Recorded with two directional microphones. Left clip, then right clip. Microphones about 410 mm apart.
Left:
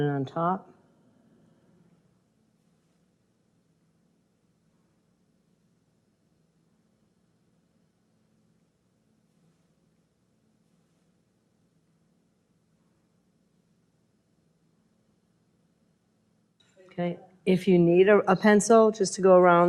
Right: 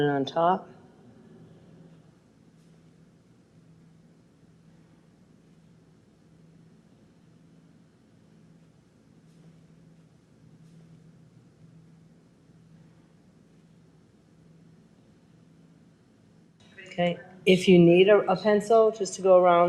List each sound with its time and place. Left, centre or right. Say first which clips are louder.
0.0 s speech: right 4 dB; left
16.9 s speech: right 5 dB; left